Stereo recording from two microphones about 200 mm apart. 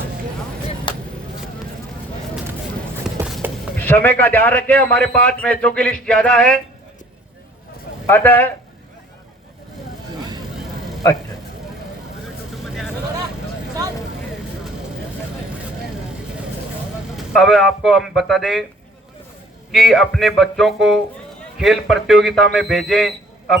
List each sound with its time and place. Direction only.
0.9 s vehicle: 25° left (ahead or behind)
3.2 s music: centre (ahead or behind)
3.8 s a man's voice: 10° left (ahead or behind)
8.0 s speech: 10° left (ahead or behind)
12.6 s vehicle: centre (ahead or behind)
17.2 s a man's voice: centre (ahead or behind)
19.7 s a man's voice: centre (ahead or behind)